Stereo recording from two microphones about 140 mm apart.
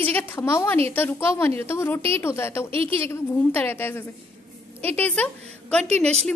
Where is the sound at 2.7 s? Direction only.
40° right (ahead or behind).